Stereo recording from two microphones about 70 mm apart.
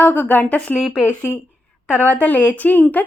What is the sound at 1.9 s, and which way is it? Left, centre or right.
Speech, left.